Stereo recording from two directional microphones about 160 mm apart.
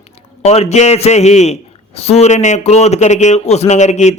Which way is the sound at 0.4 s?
40° left (ahead or behind).